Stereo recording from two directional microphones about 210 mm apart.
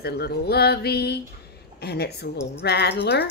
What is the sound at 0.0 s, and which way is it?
Speech, 50° left (ahead or behind).